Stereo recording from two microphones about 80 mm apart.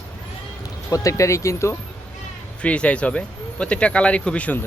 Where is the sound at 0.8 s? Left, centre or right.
Left.